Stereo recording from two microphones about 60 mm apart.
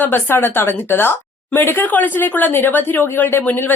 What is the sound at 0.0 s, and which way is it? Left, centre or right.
A woman's voice, left.